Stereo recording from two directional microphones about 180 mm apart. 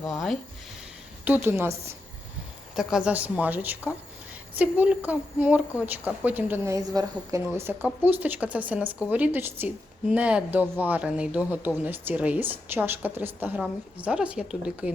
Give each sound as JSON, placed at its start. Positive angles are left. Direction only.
{"t": 0.1, "sound": "a woman's voice", "side_deg": 0}